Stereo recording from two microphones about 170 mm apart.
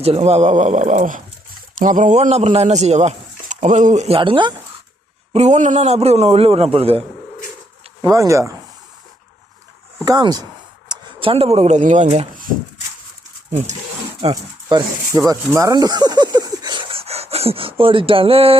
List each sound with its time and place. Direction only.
0.0 s speech: 35° right (ahead or behind)
5.3 s speech: 40° right (ahead or behind)
8.0 s speech: 20° right (ahead or behind)
10.0 s speech: 25° right (ahead or behind); by 13.7 s 40° right (ahead or behind)
14.2 s speech: 30° right (ahead or behind)